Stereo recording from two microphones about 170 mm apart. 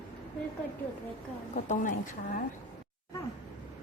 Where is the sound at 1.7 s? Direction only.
50° left (ahead or behind).